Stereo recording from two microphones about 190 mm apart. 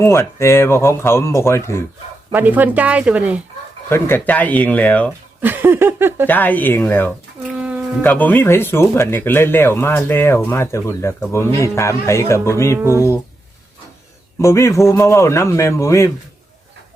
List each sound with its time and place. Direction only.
0.0 s speech: 15° left (ahead or behind)
2.3 s speech: 10° right (ahead or behind)
3.8 s speech: 10° left (ahead or behind)
5.4 s speech: 10° right (ahead or behind)
6.2 s speech: 10° left (ahead or behind)
7.5 s a sound: 5° right (ahead or behind)
8.0 s speech: 10° left (ahead or behind)
14.3 s speech: 15° left (ahead or behind)